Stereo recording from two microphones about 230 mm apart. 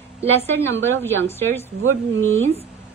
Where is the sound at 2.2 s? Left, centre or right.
Right.